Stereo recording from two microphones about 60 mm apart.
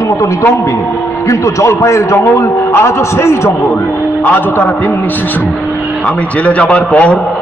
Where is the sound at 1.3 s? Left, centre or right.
Left.